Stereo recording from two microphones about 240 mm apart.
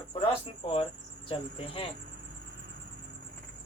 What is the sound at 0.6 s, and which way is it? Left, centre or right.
Speech, left.